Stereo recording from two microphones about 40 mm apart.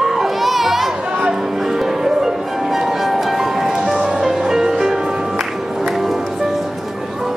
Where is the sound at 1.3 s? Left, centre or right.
Centre.